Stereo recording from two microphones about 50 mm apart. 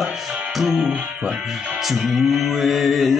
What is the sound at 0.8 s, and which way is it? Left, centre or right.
Music, right.